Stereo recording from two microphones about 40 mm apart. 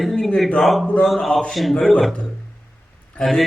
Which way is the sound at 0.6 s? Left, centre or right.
Centre.